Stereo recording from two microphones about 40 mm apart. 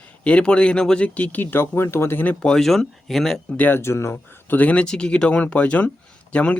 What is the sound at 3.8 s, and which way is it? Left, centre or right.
Speech, left.